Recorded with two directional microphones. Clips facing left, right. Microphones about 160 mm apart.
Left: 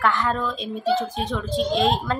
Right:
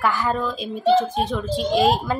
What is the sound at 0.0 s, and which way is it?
A child's voice, 5° right (ahead or behind).